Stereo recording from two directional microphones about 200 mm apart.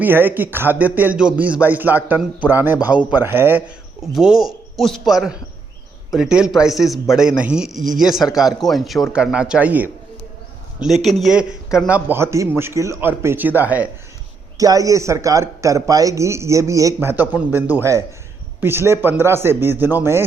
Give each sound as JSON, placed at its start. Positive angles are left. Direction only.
{"t": 0.0, "sound": "a man's voice", "side_deg": -10}